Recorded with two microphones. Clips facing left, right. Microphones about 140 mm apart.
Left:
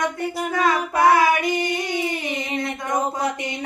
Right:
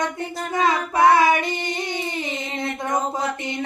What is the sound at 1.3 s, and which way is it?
Female singing, 25° right (ahead or behind).